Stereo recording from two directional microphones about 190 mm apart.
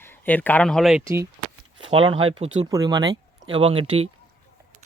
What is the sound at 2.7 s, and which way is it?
Speech, 20° right (ahead or behind).